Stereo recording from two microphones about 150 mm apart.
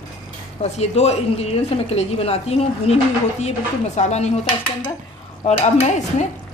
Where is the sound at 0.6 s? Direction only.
45° left (ahead or behind).